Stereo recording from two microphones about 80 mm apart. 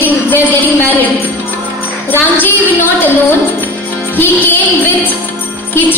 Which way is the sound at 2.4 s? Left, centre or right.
Left.